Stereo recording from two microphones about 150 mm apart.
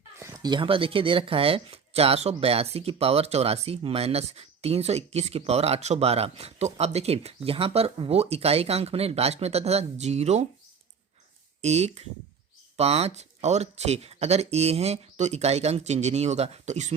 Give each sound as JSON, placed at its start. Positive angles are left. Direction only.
{"t": 0.2, "sound": "speech", "side_deg": -20}
{"t": 11.6, "sound": "speech", "side_deg": -45}